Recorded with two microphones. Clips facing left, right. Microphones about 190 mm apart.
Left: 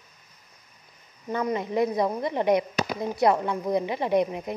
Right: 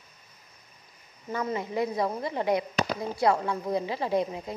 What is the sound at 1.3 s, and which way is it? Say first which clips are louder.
A woman's voice: left 4 dB; 20° left (ahead or behind).